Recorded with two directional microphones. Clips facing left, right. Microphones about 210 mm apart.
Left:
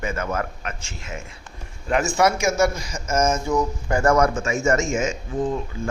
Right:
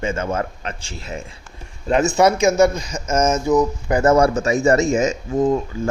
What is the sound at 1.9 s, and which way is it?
A man's voice, 20° right (ahead or behind).